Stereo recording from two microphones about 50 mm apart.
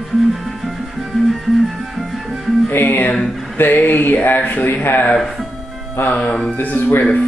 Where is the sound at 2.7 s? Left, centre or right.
Left.